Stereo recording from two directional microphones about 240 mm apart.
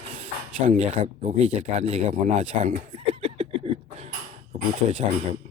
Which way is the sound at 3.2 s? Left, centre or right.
Right.